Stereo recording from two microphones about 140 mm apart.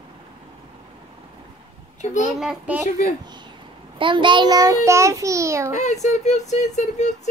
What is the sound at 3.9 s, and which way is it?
A child's voice, 35° right (ahead or behind).